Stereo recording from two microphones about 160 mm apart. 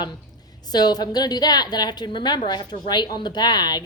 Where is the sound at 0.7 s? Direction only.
25° left (ahead or behind).